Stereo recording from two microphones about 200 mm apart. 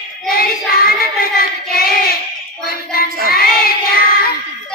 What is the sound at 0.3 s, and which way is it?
Child singing, 50° left (ahead or behind).